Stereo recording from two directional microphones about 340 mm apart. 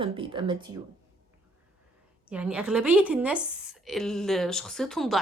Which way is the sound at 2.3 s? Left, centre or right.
Centre.